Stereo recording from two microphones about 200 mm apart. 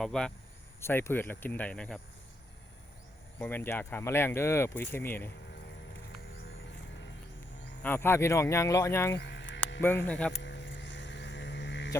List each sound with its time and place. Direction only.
0.0 s speech: 5° left (ahead or behind)
3.3 s speech: 10° left (ahead or behind)
7.8 s speech: 10° left (ahead or behind)
9.1 s sheep: 60° left (ahead or behind)
10.1 s speech: 5° left (ahead or behind)
10.4 s vehicle: 60° left (ahead or behind)